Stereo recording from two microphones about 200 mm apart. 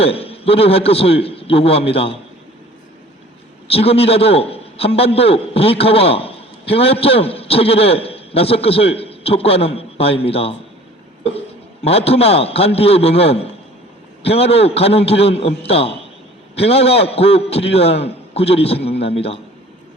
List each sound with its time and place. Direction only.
0.0 s a man's voice: 30° left (ahead or behind)
3.7 s a man's voice: 30° left (ahead or behind)
11.9 s a man's voice: 30° left (ahead or behind)